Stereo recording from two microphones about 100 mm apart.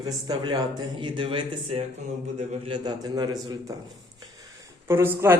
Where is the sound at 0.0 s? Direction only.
45° right (ahead or behind).